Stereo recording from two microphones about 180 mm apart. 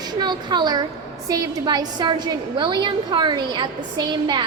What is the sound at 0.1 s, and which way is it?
A woman's voice, 25° right (ahead or behind).